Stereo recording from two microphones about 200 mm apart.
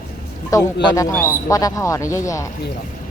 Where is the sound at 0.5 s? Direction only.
15° left (ahead or behind).